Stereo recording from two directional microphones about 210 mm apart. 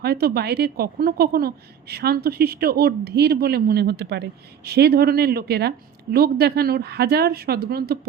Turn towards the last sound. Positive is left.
turn(degrees=-50)  # may be behind; listen again after turning